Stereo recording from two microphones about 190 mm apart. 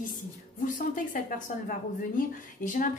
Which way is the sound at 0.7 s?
45° left (ahead or behind).